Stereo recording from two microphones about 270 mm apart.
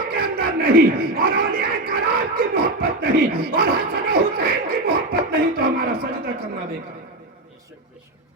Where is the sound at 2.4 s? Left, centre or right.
Right.